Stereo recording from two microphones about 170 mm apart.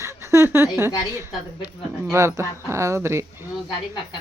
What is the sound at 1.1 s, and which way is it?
A woman's voice, 15° right (ahead or behind).